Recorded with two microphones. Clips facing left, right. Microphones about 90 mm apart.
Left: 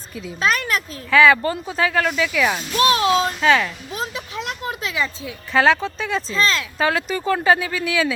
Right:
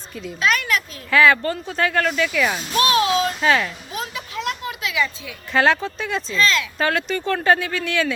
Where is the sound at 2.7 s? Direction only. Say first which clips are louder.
Left 1 dB; 30° left (ahead or behind).